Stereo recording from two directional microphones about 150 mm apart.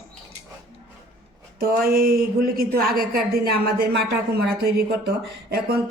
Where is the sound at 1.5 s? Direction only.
90° right.